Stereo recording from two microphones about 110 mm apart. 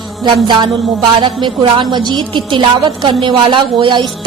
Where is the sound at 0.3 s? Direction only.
45° right (ahead or behind).